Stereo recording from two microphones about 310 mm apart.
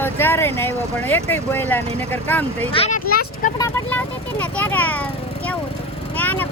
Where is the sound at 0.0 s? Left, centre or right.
Centre.